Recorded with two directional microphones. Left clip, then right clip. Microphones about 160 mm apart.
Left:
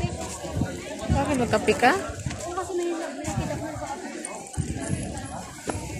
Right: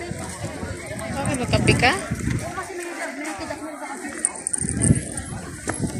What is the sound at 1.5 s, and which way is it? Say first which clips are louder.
Speech: right 2 dB; 35° left (ahead or behind).